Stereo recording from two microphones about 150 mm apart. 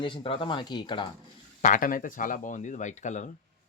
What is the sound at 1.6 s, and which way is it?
Speech, 65° left (ahead or behind).